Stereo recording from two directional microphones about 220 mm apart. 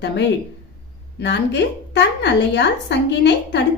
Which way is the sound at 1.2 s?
50° left (ahead or behind).